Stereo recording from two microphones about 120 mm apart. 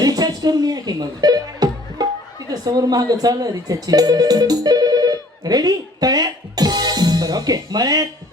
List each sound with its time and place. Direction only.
0.0 s music: 30° right (ahead or behind)
2.5 s speech: 30° right (ahead or behind)